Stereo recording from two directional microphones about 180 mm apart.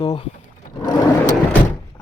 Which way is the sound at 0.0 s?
25° left (ahead or behind).